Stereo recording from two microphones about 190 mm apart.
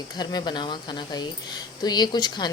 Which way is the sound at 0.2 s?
20° left (ahead or behind).